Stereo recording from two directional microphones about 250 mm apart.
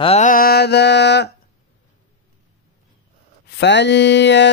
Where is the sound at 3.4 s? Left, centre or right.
Left.